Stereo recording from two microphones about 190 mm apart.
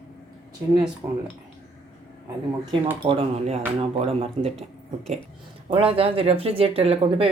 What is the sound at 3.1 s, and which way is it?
Speech, 30° right (ahead or behind).